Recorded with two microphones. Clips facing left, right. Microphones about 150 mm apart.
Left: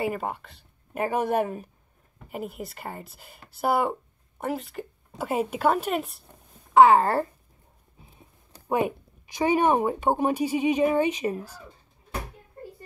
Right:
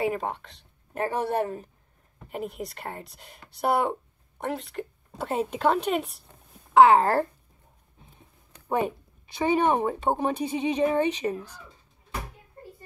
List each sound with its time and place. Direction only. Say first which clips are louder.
0.0 s speech: right 1 dB; 5° left (ahead or behind)
2.2 s a woman's voice: right 1 dB; centre (ahead or behind)
8.6 s speech: left 1 dB; 10° left (ahead or behind)
11.3 s speech: left 1 dB; 35° left (ahead or behind)